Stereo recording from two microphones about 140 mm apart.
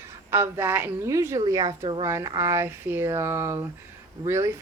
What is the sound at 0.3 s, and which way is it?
A woman's voice, 20° right (ahead or behind).